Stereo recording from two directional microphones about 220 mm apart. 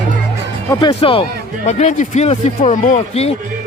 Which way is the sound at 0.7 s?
20° left (ahead or behind).